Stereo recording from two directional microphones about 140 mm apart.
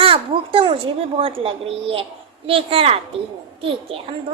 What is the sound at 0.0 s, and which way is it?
A woman's voice, 40° right (ahead or behind).